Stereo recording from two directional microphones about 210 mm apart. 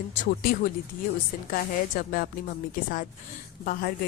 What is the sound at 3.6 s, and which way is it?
Speech, 40° left (ahead or behind).